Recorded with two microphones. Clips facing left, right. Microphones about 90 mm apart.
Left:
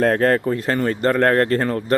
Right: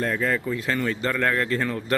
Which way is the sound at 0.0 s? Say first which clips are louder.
Left 8 dB; 70° left (ahead or behind).